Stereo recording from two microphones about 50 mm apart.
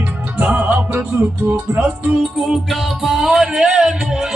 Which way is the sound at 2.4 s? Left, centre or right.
Centre.